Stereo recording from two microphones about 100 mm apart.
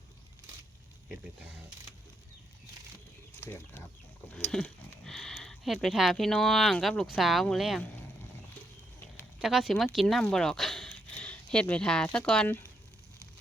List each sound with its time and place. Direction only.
3.4 s speech: 20° left (ahead or behind)
4.5 s speech: 5° left (ahead or behind)
9.4 s speech: 5° right (ahead or behind)